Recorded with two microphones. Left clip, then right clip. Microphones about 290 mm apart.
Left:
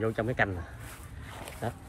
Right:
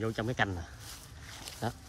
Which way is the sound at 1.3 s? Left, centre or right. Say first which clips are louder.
Left 1 dB; centre.